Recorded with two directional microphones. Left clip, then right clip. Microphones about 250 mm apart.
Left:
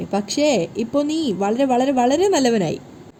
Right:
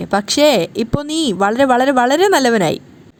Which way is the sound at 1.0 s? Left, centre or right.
Right.